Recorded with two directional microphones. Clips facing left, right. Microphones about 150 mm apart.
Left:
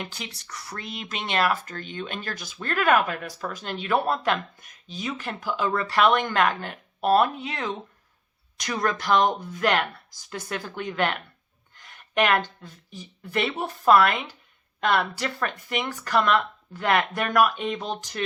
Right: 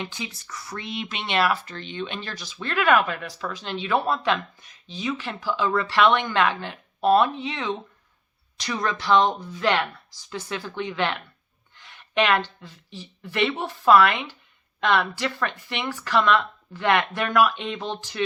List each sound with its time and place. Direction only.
0.4 s speech: 40° left (ahead or behind)
11.7 s a sound: 45° left (ahead or behind)
13.3 s speech: 40° left (ahead or behind)